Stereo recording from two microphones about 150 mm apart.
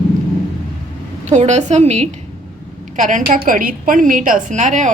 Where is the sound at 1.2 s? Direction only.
50° right (ahead or behind).